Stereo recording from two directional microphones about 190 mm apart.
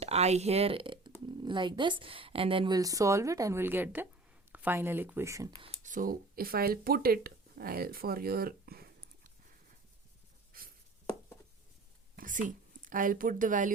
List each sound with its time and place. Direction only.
0.0 s speech: 35° right (ahead or behind); by 5.5 s 15° right (ahead or behind)
5.6 s speech: 40° right (ahead or behind)
10.5 s writing: 50° right (ahead or behind)
12.1 s a sound: 45° right (ahead or behind)
12.8 s speech: 45° right (ahead or behind)